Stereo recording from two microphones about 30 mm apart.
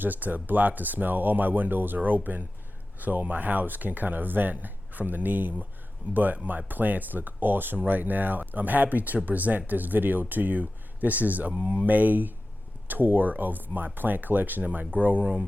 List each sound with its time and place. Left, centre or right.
0.0 s speech: right
3.0 s speech: right
6.1 s speech: right
6.7 s speech: right
11.5 s speech: right
11.9 s speech: right
14.6 s speech: right